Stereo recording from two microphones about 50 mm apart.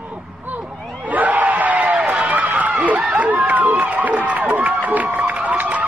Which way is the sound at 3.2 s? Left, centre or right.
Right.